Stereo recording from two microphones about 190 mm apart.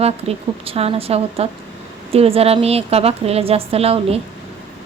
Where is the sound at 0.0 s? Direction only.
30° right (ahead or behind).